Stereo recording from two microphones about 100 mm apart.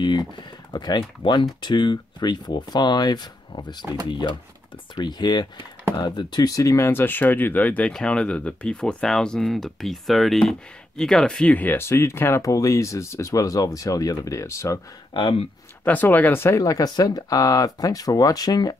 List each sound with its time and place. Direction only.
0.0 s speech: 50° left (ahead or behind); by 14.8 s 30° left (ahead or behind)
15.1 s speech: 55° left (ahead or behind)
15.8 s speech: 15° left (ahead or behind); by 18.8 s 40° left (ahead or behind)